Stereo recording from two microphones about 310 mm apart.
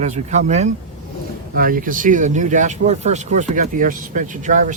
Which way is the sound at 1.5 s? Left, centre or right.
Right.